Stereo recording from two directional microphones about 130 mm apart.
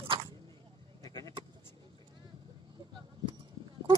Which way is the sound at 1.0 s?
25° left (ahead or behind).